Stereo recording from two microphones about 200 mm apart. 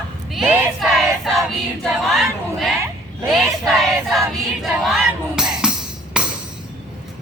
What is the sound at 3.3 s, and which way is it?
Child singing, centre (ahead or behind).